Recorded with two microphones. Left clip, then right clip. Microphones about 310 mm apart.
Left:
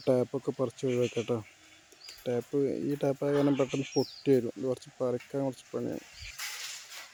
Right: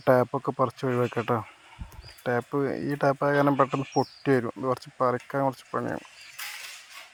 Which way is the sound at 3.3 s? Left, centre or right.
Centre.